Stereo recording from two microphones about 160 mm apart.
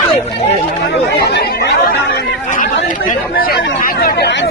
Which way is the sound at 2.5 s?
55° left (ahead or behind).